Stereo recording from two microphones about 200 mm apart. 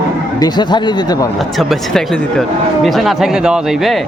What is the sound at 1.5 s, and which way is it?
Speech, 5° left (ahead or behind).